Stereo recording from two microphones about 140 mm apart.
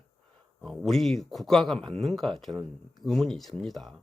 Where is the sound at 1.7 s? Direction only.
45° right (ahead or behind).